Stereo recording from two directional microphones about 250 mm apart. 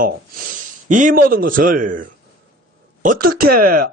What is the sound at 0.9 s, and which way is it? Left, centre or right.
Speech, right.